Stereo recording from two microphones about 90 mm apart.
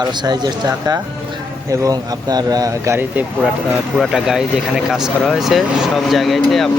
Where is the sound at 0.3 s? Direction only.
50° right (ahead or behind).